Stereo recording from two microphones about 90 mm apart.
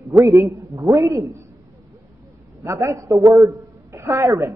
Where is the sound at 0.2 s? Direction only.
35° right (ahead or behind).